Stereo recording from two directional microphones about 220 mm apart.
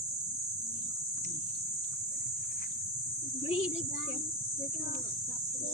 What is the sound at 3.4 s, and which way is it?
Speech, 30° left (ahead or behind).